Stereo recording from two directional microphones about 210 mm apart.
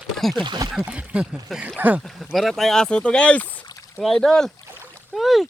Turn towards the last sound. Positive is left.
turn(degrees=0)  # may be behind; listen again after turning